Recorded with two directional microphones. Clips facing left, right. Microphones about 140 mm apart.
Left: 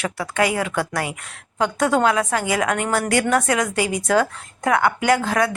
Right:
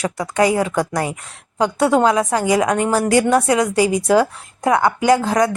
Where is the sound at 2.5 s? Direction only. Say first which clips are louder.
Right 5 dB; 20° right (ahead or behind).